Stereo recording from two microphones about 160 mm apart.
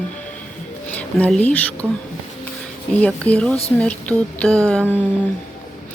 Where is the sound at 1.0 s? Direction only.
10° left (ahead or behind).